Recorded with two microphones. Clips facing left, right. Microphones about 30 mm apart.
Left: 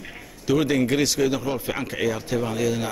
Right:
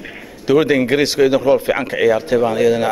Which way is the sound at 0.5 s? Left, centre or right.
Right.